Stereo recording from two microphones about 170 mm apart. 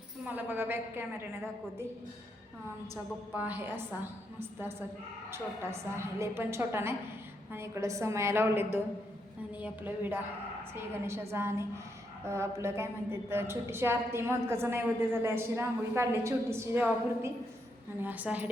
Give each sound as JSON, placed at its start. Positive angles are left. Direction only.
{"t": 0.3, "sound": "a woman's voice", "side_deg": -10}
{"t": 2.9, "sound": "a woman's voice", "side_deg": -10}
{"t": 5.3, "sound": "a woman's voice", "side_deg": -15}